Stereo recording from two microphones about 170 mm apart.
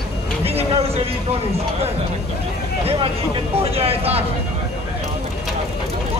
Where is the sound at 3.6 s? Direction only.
35° right (ahead or behind).